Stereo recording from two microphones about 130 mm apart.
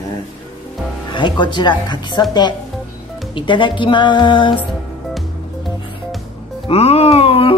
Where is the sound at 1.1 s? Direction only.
35° left (ahead or behind).